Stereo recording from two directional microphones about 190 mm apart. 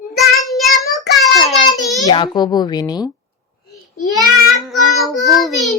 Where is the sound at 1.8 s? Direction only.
Centre (ahead or behind).